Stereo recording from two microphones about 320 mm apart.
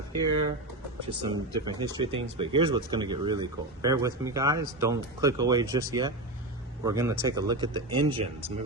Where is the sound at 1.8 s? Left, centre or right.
Centre.